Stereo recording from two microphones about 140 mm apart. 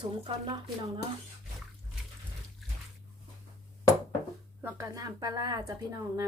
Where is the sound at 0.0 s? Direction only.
35° right (ahead or behind).